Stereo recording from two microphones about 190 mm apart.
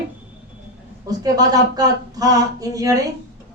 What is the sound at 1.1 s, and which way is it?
Speech, 20° right (ahead or behind).